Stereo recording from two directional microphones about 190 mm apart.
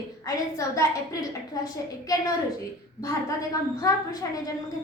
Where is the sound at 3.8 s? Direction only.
20° left (ahead or behind).